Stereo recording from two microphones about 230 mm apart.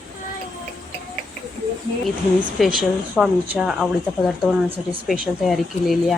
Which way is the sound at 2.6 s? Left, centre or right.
Centre.